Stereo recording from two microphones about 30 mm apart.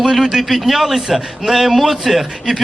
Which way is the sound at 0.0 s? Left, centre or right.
Centre.